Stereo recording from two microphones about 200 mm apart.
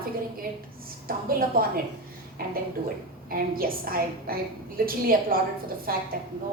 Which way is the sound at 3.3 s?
45° right (ahead or behind).